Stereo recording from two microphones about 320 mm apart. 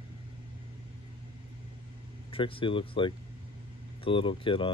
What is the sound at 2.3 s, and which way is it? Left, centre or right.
Speech, centre.